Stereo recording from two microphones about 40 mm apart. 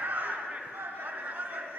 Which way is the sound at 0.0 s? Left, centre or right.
Right.